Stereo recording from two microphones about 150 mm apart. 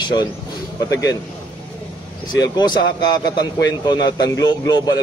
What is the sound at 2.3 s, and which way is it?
A man's voice, 30° left (ahead or behind).